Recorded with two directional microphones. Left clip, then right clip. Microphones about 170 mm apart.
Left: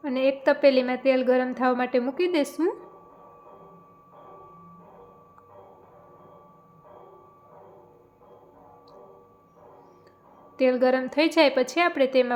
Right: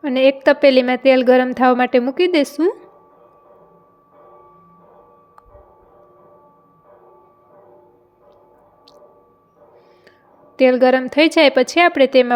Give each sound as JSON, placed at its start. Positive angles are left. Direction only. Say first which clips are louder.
{"t": 0.0, "sound": "a woman's voice", "louder": "right 9 dB", "side_deg": -45}
{"t": 10.6, "sound": "a woman's voice", "louder": "right 9 dB", "side_deg": -45}